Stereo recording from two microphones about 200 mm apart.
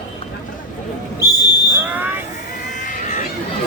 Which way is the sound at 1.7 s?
10° right (ahead or behind).